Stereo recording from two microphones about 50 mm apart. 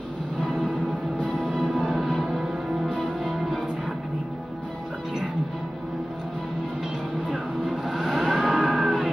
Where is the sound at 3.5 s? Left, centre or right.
Centre.